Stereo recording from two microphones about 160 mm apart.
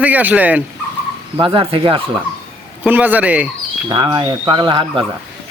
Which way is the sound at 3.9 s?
25° right (ahead or behind).